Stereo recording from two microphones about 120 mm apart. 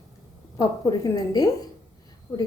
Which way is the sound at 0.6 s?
30° left (ahead or behind).